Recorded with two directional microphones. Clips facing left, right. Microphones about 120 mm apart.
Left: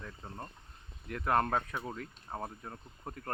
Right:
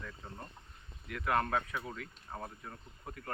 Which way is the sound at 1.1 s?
35° left (ahead or behind).